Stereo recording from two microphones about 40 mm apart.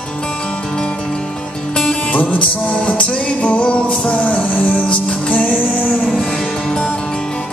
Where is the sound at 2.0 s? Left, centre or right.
Left.